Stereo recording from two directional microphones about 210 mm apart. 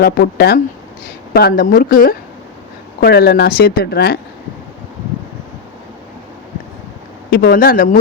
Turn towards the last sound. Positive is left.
turn(degrees=40)  # may be behind; listen again after turning